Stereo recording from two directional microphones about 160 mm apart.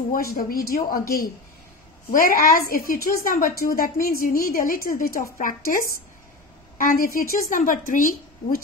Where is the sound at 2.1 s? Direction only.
60° left (ahead or behind).